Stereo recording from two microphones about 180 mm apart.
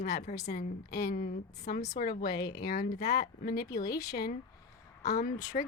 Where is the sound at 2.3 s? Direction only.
20° left (ahead or behind).